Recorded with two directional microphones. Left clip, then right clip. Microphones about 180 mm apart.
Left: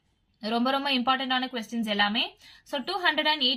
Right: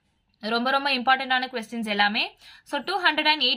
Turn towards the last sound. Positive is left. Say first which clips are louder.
# right 3 dB
turn(degrees=-20)  # may be behind; listen again after turning